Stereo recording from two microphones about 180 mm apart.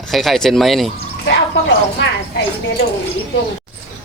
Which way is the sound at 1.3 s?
75° left (ahead or behind).